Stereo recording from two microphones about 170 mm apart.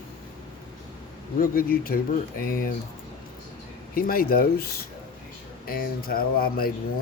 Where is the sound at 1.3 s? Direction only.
60° left (ahead or behind).